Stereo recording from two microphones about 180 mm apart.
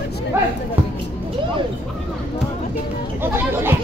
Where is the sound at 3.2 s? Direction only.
10° right (ahead or behind).